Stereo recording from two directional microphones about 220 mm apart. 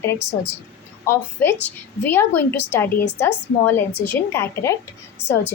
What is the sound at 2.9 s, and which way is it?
Speech, 50° left (ahead or behind).